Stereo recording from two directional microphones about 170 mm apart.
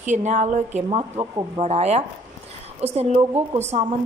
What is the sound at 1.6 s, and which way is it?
A woman's voice, 40° right (ahead or behind).